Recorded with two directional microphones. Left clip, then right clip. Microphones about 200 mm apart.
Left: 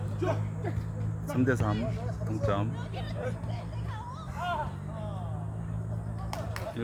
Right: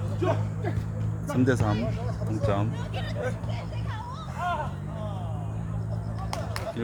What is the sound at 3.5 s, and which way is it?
Music, 35° right (ahead or behind).